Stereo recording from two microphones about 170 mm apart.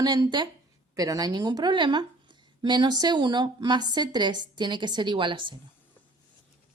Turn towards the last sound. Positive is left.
turn(degrees=-30)  # may be behind; listen again after turning